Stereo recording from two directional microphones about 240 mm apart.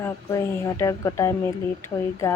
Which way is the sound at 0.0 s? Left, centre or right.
Centre.